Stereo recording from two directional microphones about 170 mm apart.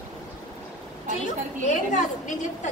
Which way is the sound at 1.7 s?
45° left (ahead or behind).